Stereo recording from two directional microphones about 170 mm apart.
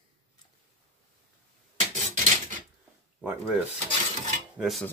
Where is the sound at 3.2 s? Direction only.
5° right (ahead or behind).